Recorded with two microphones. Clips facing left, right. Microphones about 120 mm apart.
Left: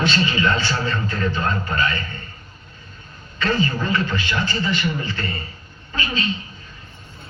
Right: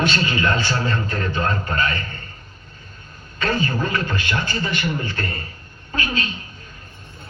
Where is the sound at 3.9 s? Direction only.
55° right (ahead or behind).